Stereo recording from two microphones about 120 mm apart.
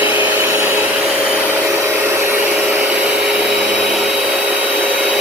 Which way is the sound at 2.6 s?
10° right (ahead or behind).